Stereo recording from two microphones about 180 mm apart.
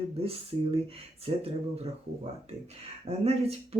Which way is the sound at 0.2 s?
35° right (ahead or behind).